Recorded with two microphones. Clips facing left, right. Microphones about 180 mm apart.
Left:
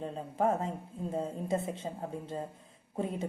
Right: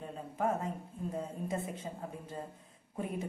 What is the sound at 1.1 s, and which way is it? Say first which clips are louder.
Speech: left 5 dB; 25° left (ahead or behind).